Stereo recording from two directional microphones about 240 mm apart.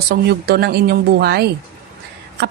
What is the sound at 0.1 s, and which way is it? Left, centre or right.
A woman's voice, right.